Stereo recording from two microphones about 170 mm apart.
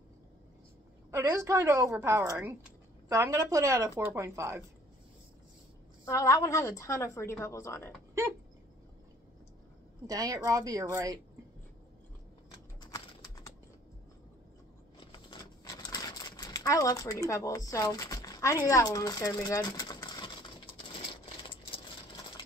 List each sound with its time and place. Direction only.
1.1 s speech: 15° right (ahead or behind)
6.0 s a woman's voice: 20° left (ahead or behind)
10.0 s a woman's voice: 20° right (ahead or behind)
12.8 s typing: 20° left (ahead or behind)
15.2 s a sound: 25° left (ahead or behind)
21.4 s coin: 30° left (ahead or behind)